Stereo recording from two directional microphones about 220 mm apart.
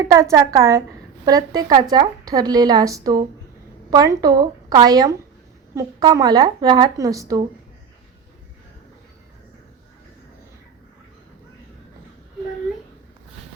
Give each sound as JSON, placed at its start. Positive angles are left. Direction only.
{"t": 0.0, "sound": "speech", "side_deg": -15}